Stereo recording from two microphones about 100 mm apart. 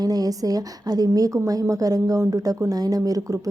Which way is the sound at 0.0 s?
40° right (ahead or behind).